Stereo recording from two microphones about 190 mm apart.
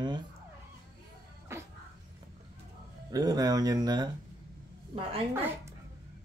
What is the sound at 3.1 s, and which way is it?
Speech, 20° right (ahead or behind).